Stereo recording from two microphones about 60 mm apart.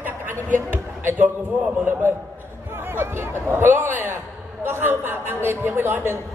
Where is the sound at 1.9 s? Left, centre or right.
Right.